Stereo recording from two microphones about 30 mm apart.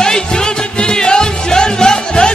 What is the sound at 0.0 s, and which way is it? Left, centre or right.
Music, left.